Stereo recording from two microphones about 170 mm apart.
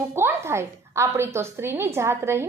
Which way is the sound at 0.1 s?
15° right (ahead or behind).